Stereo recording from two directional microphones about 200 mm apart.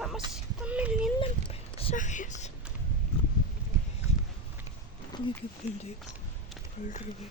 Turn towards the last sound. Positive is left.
turn(degrees=40)  # may be behind; listen again after turning